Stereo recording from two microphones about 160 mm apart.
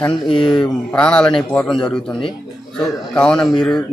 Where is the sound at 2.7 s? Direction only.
5° left (ahead or behind).